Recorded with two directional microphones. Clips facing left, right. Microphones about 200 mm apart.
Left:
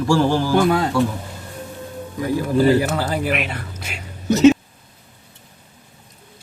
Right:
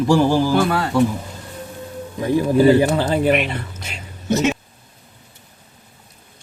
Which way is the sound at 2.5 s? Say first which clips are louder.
Right 2 dB; 15° right (ahead or behind).